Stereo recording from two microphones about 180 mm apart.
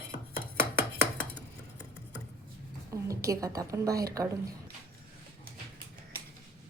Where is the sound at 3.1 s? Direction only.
20° right (ahead or behind).